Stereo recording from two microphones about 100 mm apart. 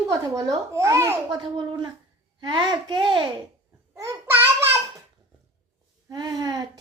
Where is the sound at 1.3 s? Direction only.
50° right (ahead or behind).